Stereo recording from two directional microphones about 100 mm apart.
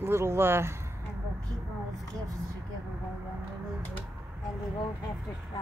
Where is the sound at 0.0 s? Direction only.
25° right (ahead or behind).